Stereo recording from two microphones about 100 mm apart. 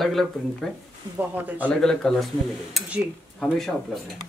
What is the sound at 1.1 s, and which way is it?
Speech, 15° right (ahead or behind).